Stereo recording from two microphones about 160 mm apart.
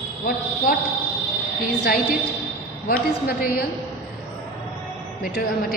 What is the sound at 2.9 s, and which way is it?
Speech, 65° left (ahead or behind).